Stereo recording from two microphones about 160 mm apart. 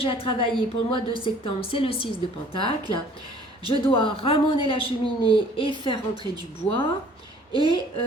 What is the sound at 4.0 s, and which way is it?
A man's voice, 35° left (ahead or behind).